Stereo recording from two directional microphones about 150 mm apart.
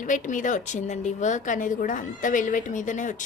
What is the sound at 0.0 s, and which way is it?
A woman's voice, 60° left (ahead or behind).